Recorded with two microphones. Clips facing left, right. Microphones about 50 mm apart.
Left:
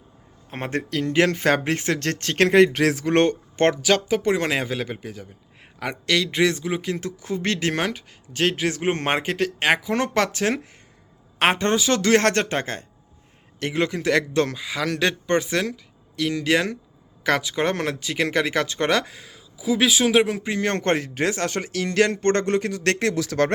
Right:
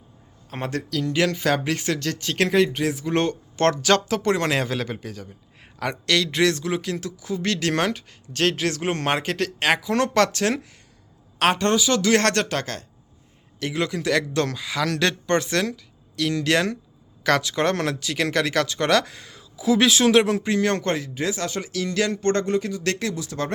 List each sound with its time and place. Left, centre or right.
0.6 s speech: left
2.7 s speech: left
3.8 s speech: centre
7.2 s speech: left
7.7 s speech: centre
9.2 s speech: centre
20.7 s speech: left
23.1 s speech: left